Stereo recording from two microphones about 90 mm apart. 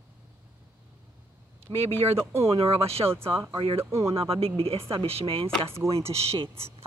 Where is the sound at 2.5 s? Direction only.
90° right.